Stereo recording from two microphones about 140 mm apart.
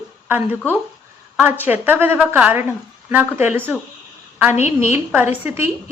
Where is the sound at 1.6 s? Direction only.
15° right (ahead or behind).